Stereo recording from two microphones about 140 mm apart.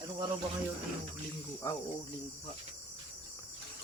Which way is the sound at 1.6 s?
25° left (ahead or behind).